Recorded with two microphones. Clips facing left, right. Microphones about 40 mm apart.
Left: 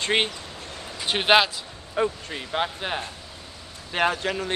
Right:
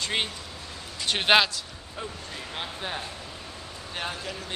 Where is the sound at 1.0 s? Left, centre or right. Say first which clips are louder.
Left 2 dB; centre.